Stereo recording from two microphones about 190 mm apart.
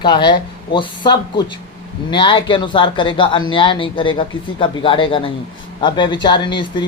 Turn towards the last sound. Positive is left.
turn(degrees=25)  # may be behind; listen again after turning